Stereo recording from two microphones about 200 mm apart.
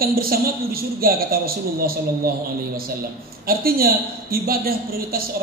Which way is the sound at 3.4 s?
50° right (ahead or behind).